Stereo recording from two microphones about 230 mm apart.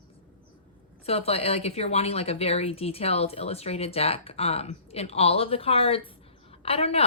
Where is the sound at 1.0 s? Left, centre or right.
Left.